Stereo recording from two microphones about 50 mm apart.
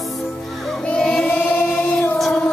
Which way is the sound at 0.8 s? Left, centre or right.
Left.